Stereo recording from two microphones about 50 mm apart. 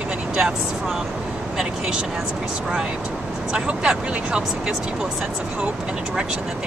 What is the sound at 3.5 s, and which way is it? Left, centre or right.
Speech, centre.